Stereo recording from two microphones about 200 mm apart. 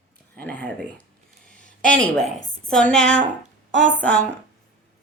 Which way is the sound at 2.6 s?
5° left (ahead or behind).